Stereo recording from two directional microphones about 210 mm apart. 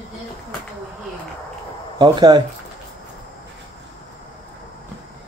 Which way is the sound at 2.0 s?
20° right (ahead or behind).